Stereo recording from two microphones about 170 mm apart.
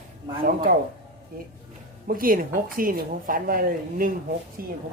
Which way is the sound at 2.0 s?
55° right (ahead or behind).